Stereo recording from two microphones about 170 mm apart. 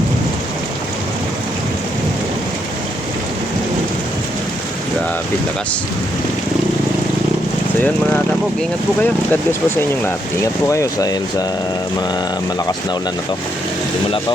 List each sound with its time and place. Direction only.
9.0 s speech: 10° left (ahead or behind)